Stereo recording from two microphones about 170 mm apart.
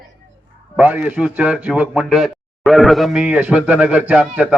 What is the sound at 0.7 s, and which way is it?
A man's voice, 10° right (ahead or behind).